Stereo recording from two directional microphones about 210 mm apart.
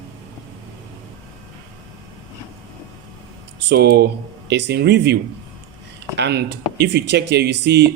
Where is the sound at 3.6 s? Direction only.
50° right (ahead or behind).